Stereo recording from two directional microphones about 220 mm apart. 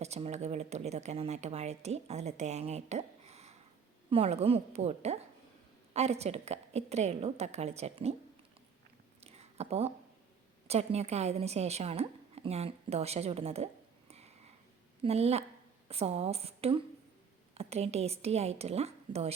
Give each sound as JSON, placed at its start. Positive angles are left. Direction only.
{"t": 0.0, "sound": "speech", "side_deg": -30}
{"t": 9.2, "sound": "a sound", "side_deg": -30}
{"t": 10.7, "sound": "speech", "side_deg": -30}
{"t": 15.0, "sound": "speech", "side_deg": -30}